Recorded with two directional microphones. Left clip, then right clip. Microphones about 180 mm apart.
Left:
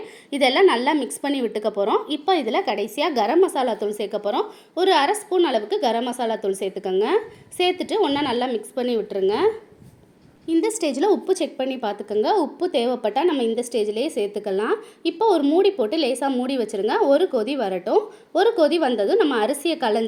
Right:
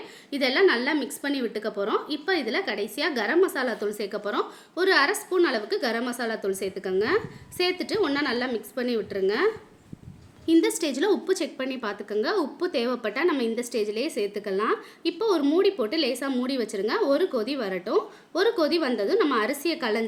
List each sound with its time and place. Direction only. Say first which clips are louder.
0.7 s a woman's voice: left 4 dB; 15° left (ahead or behind)